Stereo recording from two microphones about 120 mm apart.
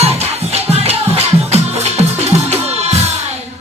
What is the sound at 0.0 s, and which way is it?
Music, 60° right (ahead or behind).